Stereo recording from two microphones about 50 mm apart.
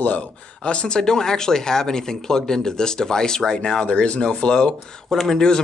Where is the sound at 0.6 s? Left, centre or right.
Centre.